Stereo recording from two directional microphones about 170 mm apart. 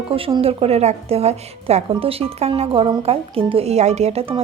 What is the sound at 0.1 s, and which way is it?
A woman's voice, 30° right (ahead or behind).